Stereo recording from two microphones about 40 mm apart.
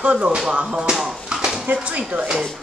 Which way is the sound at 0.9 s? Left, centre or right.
Centre.